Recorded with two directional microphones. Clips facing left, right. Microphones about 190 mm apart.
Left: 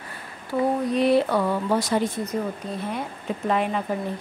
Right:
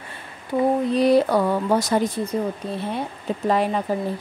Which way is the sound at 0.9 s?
40° right (ahead or behind).